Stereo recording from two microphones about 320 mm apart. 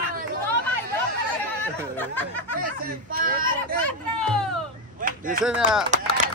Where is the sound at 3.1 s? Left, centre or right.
Right.